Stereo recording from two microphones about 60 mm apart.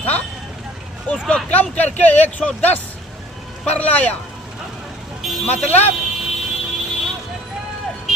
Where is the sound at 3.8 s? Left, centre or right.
Left.